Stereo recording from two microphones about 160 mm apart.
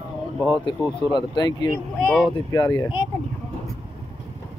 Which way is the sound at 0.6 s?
30° left (ahead or behind).